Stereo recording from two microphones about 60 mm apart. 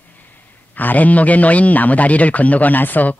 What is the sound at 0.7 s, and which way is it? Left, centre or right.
A man's voice, left.